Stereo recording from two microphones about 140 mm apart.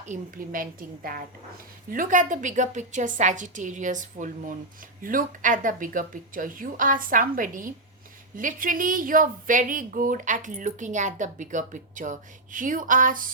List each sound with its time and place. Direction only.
0.0 s a woman's voice: 70° right (ahead or behind); by 1.2 s 90° right
1.9 s a woman's voice: 75° right (ahead or behind)